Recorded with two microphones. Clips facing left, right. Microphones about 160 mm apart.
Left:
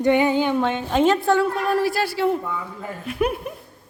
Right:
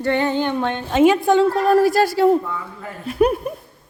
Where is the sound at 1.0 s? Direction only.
15° right (ahead or behind).